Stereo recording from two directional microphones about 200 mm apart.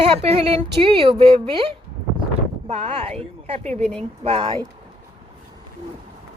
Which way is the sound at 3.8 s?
5° left (ahead or behind).